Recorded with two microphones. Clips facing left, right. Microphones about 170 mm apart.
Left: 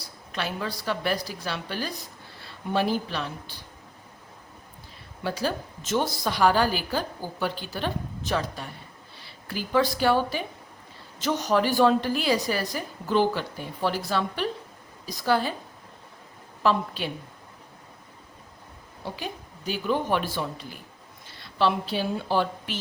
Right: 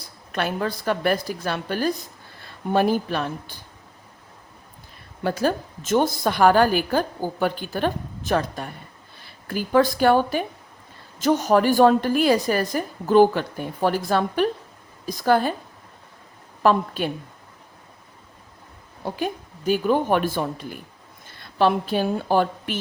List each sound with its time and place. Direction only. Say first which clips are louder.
0.0 s a woman's voice: right 6 dB; 55° right (ahead or behind)
5.2 s a woman's voice: right 6 dB; 50° right (ahead or behind)
16.6 s a woman's voice: right 5 dB; 50° right (ahead or behind)
19.0 s a woman's voice: right 8 dB; 50° right (ahead or behind)